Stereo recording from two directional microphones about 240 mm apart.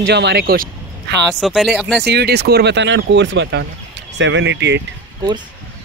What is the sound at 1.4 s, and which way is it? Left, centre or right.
Speech, centre.